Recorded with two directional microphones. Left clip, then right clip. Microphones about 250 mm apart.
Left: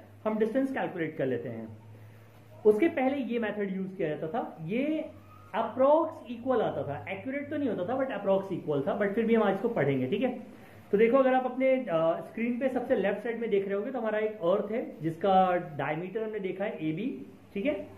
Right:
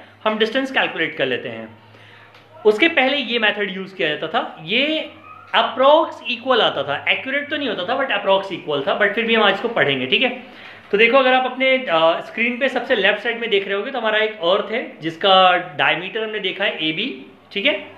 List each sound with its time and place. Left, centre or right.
0.2 s a man's voice: centre
2.6 s a man's voice: centre